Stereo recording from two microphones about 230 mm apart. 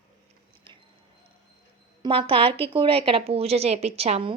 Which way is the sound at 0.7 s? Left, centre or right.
Right.